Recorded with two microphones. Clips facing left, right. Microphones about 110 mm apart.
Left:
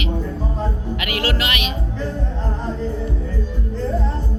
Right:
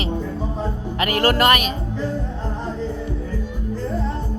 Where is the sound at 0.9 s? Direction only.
40° right (ahead or behind).